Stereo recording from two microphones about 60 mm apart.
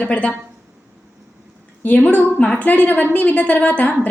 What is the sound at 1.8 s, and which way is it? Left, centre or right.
A woman's voice, left.